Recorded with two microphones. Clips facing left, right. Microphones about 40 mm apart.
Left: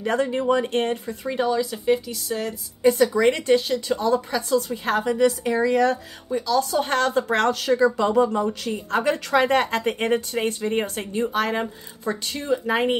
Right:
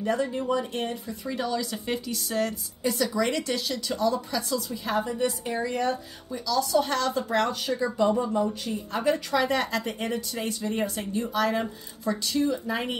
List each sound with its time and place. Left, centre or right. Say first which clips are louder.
0.0 s speech: left 4 dB; left
1.3 s speech: left 6 dB; left
1.6 s speech: left 9 dB; centre
2.8 s speech: left 8 dB; left
4.8 s a woman's voice: left 5 dB; left
6.3 s speech: left 3 dB; left